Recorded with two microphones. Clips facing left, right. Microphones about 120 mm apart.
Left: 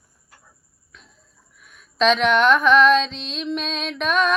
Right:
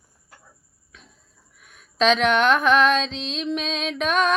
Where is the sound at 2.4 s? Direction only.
55° right (ahead or behind).